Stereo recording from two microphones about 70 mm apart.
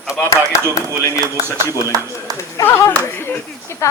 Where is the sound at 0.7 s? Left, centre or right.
Left.